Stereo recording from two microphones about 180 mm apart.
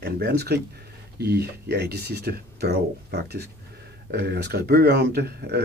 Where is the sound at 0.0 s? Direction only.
65° right (ahead or behind).